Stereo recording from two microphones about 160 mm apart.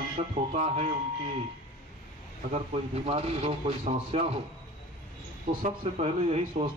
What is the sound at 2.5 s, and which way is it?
Speech, 40° right (ahead or behind).